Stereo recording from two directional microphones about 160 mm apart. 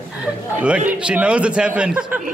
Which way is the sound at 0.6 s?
5° right (ahead or behind).